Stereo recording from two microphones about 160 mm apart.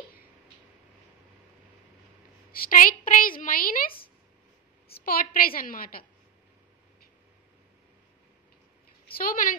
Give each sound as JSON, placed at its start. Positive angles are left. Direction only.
{"t": 2.5, "sound": "a woman's voice", "side_deg": 60}
{"t": 4.9, "sound": "a woman's voice", "side_deg": 70}
{"t": 9.1, "sound": "a woman's voice", "side_deg": 60}